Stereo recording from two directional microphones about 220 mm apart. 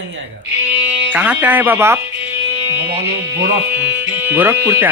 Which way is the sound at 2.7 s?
10° right (ahead or behind).